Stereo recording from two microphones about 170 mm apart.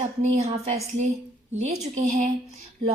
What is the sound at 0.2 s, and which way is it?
Speech, 60° right (ahead or behind).